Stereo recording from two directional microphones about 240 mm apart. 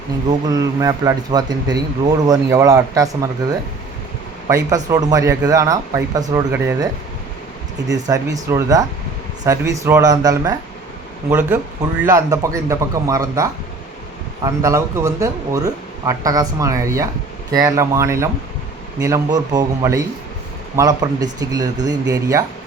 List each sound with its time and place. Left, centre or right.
0.3 s speech: centre
4.4 s speech: centre
7.9 s speech: centre